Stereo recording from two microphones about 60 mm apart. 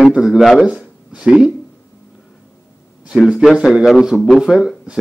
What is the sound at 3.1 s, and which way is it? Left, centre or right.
A man's voice, centre.